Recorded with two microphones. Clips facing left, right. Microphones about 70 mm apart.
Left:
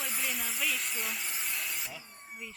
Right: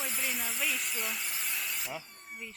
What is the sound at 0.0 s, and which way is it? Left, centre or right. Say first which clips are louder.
Hiss: even; centre.